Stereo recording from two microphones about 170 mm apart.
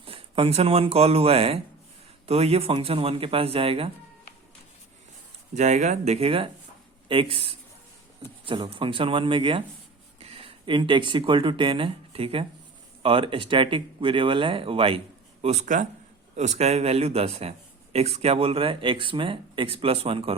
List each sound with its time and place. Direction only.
0.0 s speech: 35° right (ahead or behind)
5.5 s speech: 45° right (ahead or behind)